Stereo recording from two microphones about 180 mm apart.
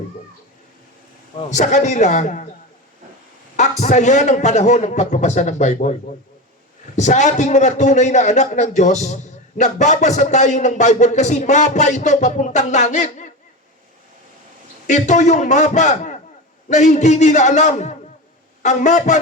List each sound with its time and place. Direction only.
1.5 s a man's voice: 40° left (ahead or behind)
3.6 s a man's voice: 40° left (ahead or behind)
14.8 s a man's voice: 40° left (ahead or behind)